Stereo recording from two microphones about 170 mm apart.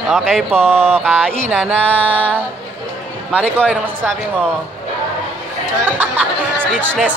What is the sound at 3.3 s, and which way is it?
Speech, 10° right (ahead or behind).